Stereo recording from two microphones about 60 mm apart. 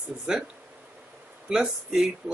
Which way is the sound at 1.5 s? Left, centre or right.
Centre.